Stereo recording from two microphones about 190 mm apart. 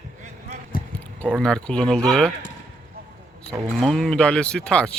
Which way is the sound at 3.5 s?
15° right (ahead or behind).